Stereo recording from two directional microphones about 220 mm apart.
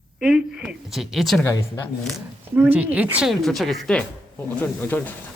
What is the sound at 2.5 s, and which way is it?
Speech, 10° right (ahead or behind).